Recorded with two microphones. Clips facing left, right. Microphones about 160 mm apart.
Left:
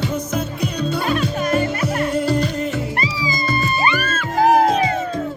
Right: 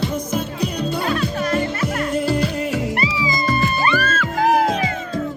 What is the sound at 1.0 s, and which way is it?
Music, 20° left (ahead or behind).